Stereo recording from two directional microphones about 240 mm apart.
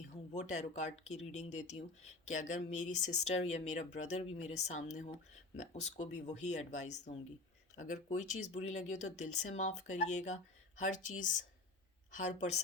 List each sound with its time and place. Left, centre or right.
0.3 s speech: left
12.1 s speech: left